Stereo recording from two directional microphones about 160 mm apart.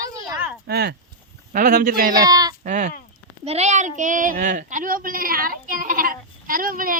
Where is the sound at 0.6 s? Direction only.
85° right.